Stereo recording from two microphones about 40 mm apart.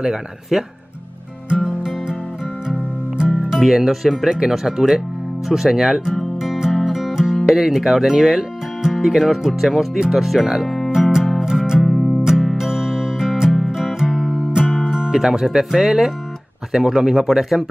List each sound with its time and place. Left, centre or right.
0.1 s speech: centre
1.5 s music: centre
3.5 s speech: centre
6.3 s music: centre
7.4 s speech: centre
10.9 s music: centre
11.8 s music: centre
12.5 s music: centre
14.1 s music: centre
14.5 s music: centre
14.9 s speech: centre